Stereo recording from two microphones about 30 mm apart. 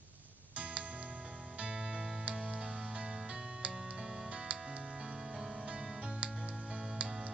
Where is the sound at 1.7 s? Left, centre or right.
Right.